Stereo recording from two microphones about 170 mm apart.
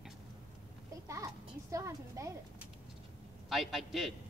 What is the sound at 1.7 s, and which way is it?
Speech, 20° right (ahead or behind).